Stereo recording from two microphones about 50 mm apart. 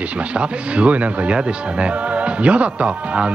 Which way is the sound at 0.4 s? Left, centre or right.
Right.